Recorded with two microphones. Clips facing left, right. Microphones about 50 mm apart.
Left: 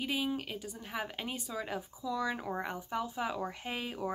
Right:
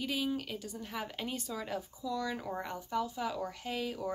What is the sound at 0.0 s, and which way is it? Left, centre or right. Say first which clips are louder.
A woman's voice: even; centre.